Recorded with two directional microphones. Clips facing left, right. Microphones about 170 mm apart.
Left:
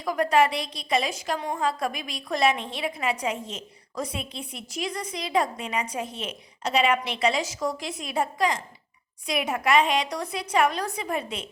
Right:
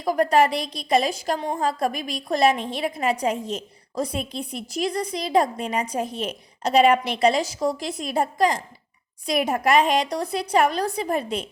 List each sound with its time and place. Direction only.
0.0 s a woman's voice: 35° right (ahead or behind)